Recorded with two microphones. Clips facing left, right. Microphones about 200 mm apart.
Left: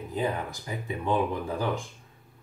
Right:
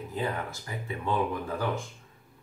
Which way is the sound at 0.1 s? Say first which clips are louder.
Left 3 dB; 20° left (ahead or behind).